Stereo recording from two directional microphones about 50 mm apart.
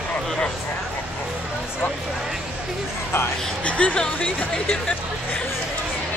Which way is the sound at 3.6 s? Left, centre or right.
Left.